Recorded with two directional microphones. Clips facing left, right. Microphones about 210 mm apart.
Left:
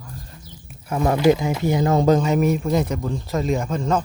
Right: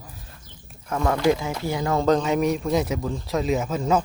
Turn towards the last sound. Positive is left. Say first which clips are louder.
# even
turn(degrees=-5)  # may be behind; listen again after turning